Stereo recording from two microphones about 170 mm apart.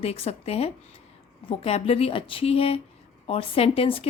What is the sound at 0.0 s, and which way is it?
Speech, 35° left (ahead or behind).